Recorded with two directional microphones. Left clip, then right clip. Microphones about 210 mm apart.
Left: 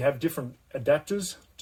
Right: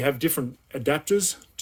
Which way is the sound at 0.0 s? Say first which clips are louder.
Right 2 dB; 50° right (ahead or behind).